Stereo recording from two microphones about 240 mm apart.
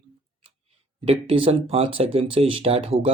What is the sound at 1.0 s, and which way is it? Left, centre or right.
Speech, right.